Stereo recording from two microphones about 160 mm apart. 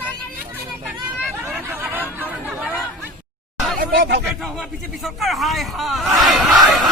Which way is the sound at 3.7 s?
65° right (ahead or behind).